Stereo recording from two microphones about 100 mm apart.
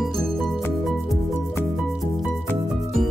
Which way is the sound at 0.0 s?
Centre (ahead or behind).